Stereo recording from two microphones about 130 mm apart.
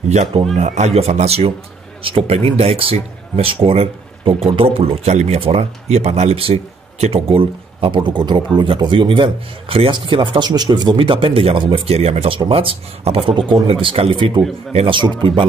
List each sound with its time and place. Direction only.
0.6 s a man's voice: 65° right (ahead or behind); by 14.4 s 40° right (ahead or behind)
14.7 s speech: 50° right (ahead or behind)
15.2 s a man's voice: 40° right (ahead or behind)